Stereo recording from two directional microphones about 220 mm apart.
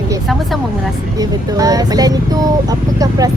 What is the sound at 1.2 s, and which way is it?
Speech, 15° right (ahead or behind).